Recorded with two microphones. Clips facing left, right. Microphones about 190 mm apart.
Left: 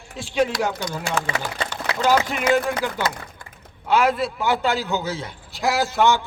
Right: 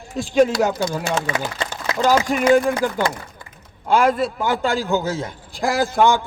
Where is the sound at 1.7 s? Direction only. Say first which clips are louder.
Right 2 dB; 45° right (ahead or behind).